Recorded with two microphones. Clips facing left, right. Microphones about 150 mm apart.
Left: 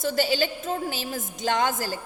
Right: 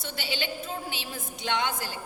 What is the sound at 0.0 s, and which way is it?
A woman's voice, 40° left (ahead or behind).